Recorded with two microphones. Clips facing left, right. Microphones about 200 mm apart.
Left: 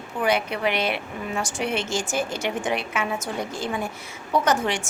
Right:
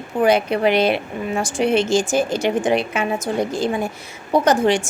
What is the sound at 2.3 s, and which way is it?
Speech, 35° right (ahead or behind).